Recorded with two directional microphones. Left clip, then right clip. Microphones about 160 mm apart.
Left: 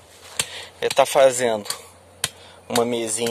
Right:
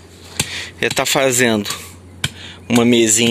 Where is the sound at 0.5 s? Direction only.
25° left (ahead or behind).